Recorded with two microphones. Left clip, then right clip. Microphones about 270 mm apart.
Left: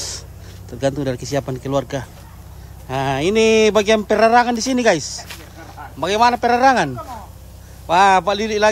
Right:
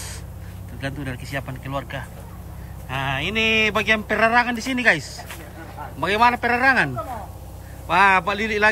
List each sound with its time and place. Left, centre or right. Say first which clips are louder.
0.7 s speech: left 11 dB; centre
7.9 s speech: left 3 dB; centre